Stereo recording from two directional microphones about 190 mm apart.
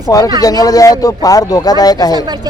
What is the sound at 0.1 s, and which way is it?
Speech, 15° left (ahead or behind).